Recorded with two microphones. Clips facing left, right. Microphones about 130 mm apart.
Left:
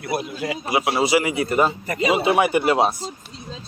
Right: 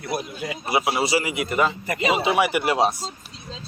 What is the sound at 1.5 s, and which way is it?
Speech, 40° left (ahead or behind).